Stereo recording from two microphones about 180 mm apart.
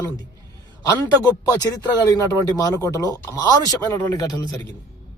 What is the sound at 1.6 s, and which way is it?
A man's voice, 20° left (ahead or behind).